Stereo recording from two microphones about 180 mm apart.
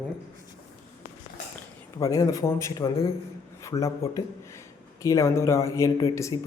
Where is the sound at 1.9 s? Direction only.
20° left (ahead or behind).